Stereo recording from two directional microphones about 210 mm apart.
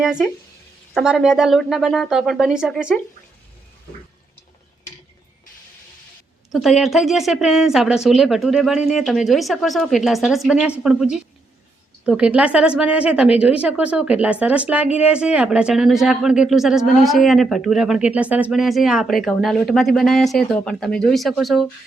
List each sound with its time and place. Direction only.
0.9 s speech: centre (ahead or behind)
6.5 s speech: centre (ahead or behind)